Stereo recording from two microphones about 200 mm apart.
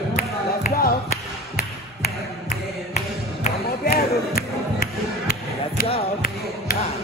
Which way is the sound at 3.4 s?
45° left (ahead or behind).